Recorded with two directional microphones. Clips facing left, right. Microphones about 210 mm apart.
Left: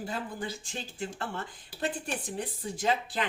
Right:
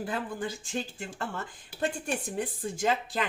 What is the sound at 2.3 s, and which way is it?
Speech, 50° right (ahead or behind).